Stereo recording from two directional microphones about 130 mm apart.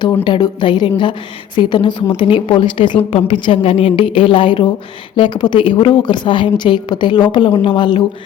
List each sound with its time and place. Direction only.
0.3 s a woman's voice: 35° left (ahead or behind)